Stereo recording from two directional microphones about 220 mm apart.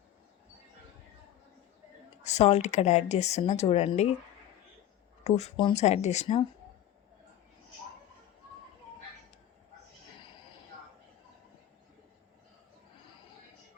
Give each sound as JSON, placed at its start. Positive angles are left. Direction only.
{"t": 2.2, "sound": "speech", "side_deg": 30}
{"t": 5.2, "sound": "speech", "side_deg": 30}